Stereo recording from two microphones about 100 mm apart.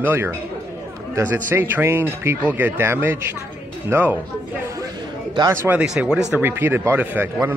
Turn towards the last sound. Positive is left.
turn(degrees=-20)  # may be behind; listen again after turning